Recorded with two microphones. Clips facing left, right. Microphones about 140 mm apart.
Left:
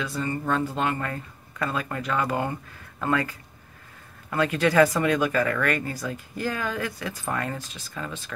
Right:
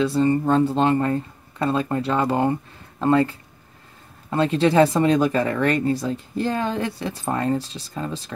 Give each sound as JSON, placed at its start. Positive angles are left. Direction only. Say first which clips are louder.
{"t": 0.0, "sound": "speech", "louder": "right 10 dB", "side_deg": -30}